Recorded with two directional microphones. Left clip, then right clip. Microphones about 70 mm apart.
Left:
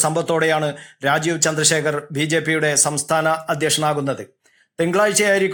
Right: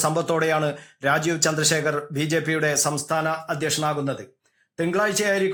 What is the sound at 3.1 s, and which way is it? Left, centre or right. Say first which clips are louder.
A man's voice: left 6 dB; centre.